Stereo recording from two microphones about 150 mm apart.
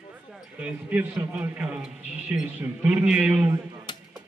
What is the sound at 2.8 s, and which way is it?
Speech, 10° right (ahead or behind).